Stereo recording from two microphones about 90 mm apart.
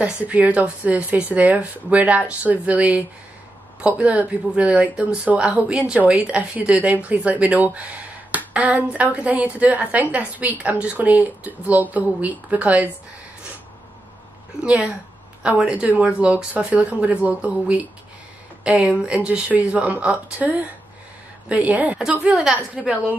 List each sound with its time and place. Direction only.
0.0 s speech: 15° right (ahead or behind)
14.6 s speech: 10° right (ahead or behind)